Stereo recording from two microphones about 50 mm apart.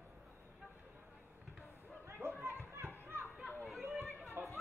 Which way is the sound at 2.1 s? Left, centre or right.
Right.